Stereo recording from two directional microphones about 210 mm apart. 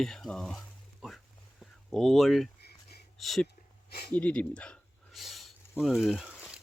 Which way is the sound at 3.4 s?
50° left (ahead or behind).